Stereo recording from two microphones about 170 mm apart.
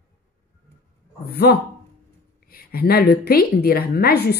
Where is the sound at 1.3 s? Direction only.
65° left (ahead or behind).